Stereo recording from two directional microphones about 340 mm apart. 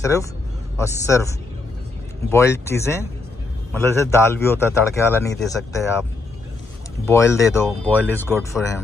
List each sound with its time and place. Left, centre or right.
0.0 s speech: centre
2.3 s speech: centre
7.1 s speech: centre